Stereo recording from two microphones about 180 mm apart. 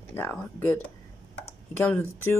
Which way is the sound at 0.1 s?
10° left (ahead or behind).